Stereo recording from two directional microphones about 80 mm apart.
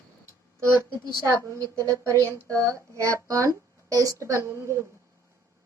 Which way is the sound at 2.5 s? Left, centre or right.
Right.